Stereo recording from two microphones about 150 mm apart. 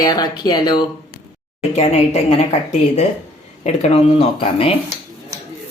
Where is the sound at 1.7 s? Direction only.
45° left (ahead or behind).